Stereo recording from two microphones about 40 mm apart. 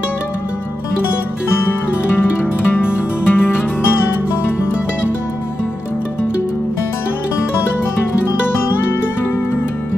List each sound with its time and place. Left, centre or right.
2.7 s music: left